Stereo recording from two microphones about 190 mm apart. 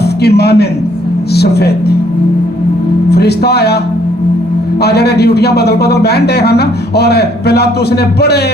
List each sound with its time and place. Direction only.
0.0 s a man's voice: 55° left (ahead or behind)
3.1 s speech: 60° left (ahead or behind)
4.8 s speech: 60° left (ahead or behind)